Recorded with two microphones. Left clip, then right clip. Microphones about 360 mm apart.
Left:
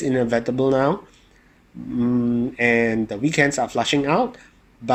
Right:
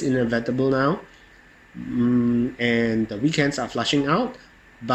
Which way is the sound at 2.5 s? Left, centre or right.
Left.